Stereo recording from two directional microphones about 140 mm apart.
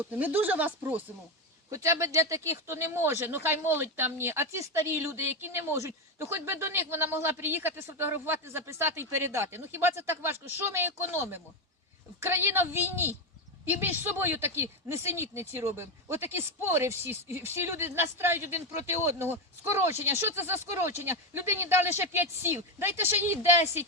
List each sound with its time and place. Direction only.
0.0 s speech: 15° right (ahead or behind)